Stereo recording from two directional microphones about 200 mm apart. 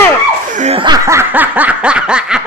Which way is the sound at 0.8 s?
15° right (ahead or behind).